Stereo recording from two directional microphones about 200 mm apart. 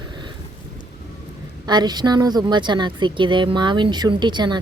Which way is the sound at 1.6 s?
20° right (ahead or behind).